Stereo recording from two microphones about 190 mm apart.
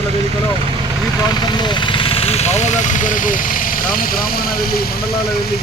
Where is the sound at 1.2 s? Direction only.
20° left (ahead or behind); by 4.9 s 50° left (ahead or behind).